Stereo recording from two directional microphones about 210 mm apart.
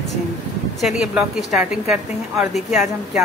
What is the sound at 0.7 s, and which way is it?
A woman's voice, centre (ahead or behind).